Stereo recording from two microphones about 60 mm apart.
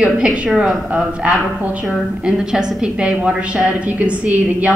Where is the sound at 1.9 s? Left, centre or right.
Centre.